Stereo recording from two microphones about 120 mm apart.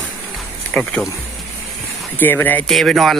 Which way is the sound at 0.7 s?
10° left (ahead or behind).